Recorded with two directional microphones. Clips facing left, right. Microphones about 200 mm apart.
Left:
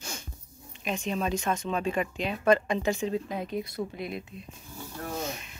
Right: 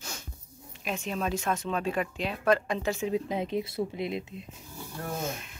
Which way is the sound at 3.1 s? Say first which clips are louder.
Right 2 dB; 20° right (ahead or behind).